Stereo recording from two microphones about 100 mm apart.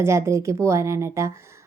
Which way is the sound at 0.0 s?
30° right (ahead or behind).